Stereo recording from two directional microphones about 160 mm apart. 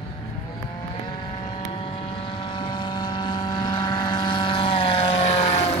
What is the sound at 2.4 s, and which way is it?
Vehicle, 30° left (ahead or behind).